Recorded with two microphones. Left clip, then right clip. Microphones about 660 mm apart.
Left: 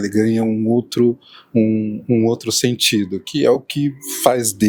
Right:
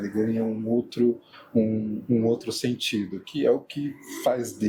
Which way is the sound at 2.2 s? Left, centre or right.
Left.